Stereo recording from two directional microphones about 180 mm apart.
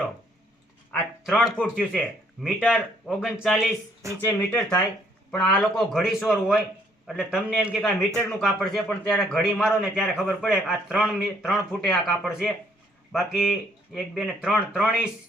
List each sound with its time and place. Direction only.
0.9 s a man's voice: centre (ahead or behind)
4.2 s a man's voice: 10° left (ahead or behind)